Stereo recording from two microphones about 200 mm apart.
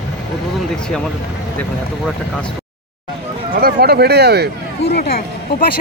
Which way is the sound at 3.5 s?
50° right (ahead or behind).